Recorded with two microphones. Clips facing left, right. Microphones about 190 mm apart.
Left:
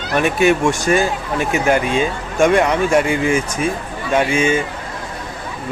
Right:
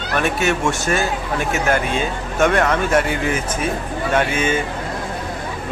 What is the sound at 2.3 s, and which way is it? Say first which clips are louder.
Speech: left 3 dB; 10° left (ahead or behind).